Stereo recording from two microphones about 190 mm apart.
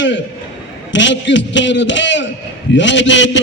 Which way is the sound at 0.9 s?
70° left (ahead or behind).